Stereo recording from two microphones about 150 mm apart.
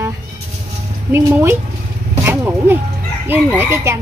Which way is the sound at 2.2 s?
15° right (ahead or behind).